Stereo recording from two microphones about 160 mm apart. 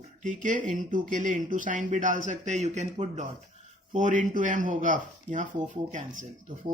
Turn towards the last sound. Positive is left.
turn(degrees=-55)  # may be behind; listen again after turning